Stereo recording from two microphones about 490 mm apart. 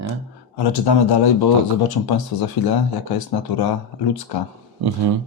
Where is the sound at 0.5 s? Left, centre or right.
Left.